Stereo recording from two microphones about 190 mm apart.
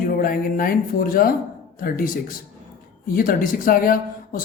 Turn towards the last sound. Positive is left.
turn(degrees=50)  # may be behind; listen again after turning